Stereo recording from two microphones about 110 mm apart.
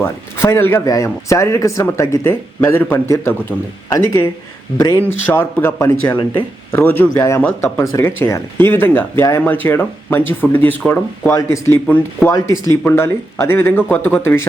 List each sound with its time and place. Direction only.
0.0 s speech: 20° left (ahead or behind)
11.9 s speech: 15° left (ahead or behind)
12.3 s speech: 25° left (ahead or behind)